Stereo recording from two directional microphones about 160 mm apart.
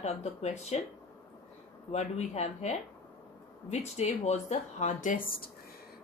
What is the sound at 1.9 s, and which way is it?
Speech, 40° left (ahead or behind).